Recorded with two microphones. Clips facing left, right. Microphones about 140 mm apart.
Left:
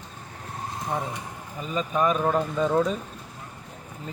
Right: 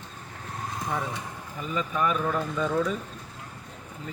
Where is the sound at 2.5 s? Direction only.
40° left (ahead or behind).